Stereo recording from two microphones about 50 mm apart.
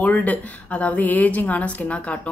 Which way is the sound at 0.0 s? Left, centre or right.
Left.